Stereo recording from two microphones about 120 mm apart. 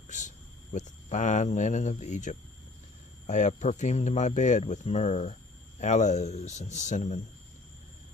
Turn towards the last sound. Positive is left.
turn(degrees=75)  # may be behind; listen again after turning